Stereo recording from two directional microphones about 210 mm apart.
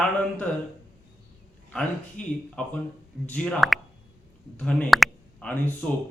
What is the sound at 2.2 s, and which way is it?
A man's voice, 5° left (ahead or behind).